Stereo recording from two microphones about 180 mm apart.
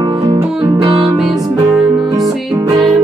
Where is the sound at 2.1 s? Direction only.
20° right (ahead or behind).